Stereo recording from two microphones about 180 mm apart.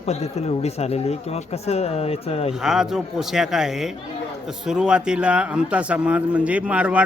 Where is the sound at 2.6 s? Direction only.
5° right (ahead or behind).